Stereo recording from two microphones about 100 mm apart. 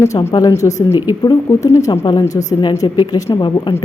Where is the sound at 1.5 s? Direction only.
30° left (ahead or behind).